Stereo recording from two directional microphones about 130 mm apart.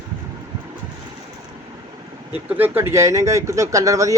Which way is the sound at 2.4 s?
15° right (ahead or behind).